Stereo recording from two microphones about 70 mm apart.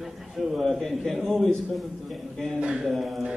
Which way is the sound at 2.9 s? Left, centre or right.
Centre.